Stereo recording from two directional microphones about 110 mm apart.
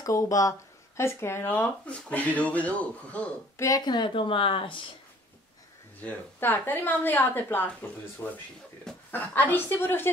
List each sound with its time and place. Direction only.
0.0 s speech: 30° left (ahead or behind); by 3.3 s 15° left (ahead or behind)
3.5 s a woman's voice: 30° left (ahead or behind); by 4.7 s 55° left (ahead or behind)
6.0 s speech: 15° left (ahead or behind)